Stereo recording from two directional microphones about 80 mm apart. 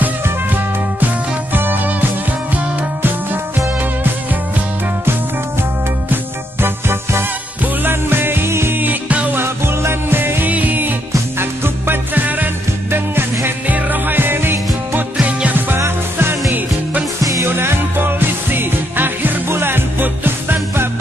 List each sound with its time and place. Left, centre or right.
0.0 s music: right
6.6 s music: right
15.8 s music: right
17.2 s music: right
17.5 s music: right